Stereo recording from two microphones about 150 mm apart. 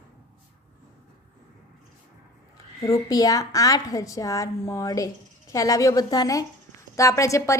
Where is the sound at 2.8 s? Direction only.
20° left (ahead or behind).